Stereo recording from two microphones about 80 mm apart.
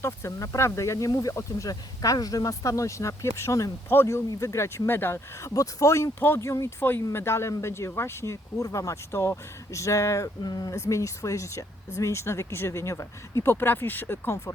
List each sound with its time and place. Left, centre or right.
0.0 s speech: left
6.1 s speech: left
10.4 s speech: left
10.8 s speech: left